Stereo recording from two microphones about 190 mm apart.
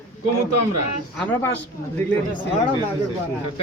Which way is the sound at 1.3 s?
10° left (ahead or behind).